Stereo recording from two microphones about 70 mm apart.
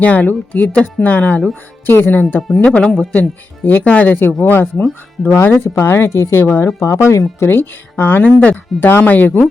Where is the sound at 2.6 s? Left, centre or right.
Centre.